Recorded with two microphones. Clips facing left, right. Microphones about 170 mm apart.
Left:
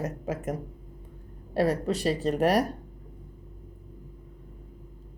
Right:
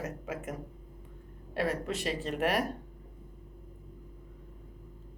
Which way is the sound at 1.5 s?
35° left (ahead or behind).